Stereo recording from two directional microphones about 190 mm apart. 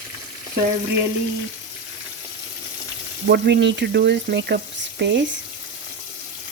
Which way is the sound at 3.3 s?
65° right (ahead or behind).